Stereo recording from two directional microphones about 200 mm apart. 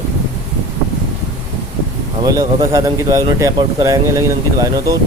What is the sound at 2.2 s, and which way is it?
Speech, 15° right (ahead or behind).